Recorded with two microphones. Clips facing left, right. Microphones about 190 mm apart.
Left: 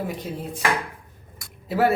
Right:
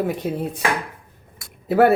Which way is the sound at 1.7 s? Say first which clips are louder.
Right 6 dB; 55° right (ahead or behind).